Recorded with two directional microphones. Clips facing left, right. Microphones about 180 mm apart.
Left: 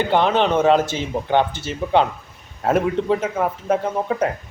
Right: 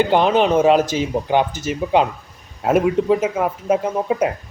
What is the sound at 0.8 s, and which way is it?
Speech, 25° left (ahead or behind).